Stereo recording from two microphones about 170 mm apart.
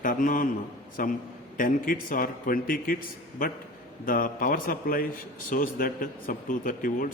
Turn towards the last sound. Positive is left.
turn(degrees=55)  # may be behind; listen again after turning